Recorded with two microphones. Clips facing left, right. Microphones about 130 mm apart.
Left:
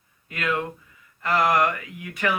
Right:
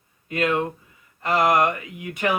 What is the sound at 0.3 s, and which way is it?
Speech, 25° right (ahead or behind).